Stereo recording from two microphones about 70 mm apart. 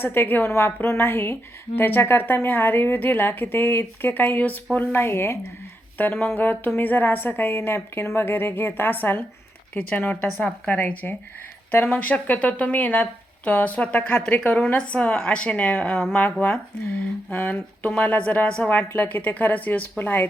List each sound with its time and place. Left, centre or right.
0.0 s a woman's voice: left
14.8 s speech: centre
15.8 s speech: left